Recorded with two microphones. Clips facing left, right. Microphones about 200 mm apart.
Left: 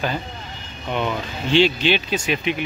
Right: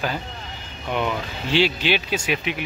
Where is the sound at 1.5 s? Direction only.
5° right (ahead or behind).